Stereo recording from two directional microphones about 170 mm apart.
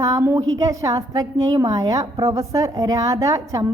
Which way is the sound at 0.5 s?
20° right (ahead or behind).